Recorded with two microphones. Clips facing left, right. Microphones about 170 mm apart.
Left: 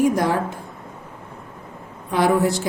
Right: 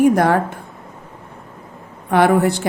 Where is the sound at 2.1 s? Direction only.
60° right (ahead or behind).